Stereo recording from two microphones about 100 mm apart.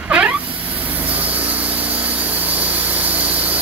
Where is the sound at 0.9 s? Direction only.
15° right (ahead or behind).